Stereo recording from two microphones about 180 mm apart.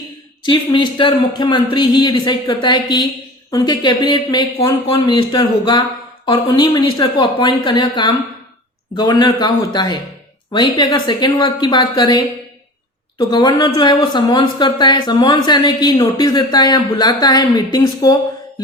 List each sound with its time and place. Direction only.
0.4 s speech: 25° left (ahead or behind)